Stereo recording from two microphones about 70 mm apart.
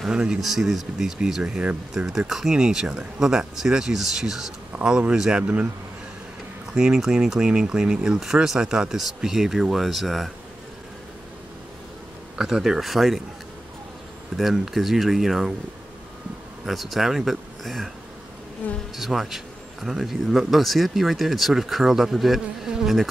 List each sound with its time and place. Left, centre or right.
0.0 s speech: centre
4.7 s speech: right
5.1 s speech: centre
6.7 s speech: centre
12.4 s speech: centre
14.3 s speech: centre
16.6 s speech: centre
18.6 s insect: left
18.9 s speech: centre